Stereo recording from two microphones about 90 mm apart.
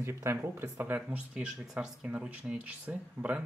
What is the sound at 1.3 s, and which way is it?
Speech, 10° right (ahead or behind).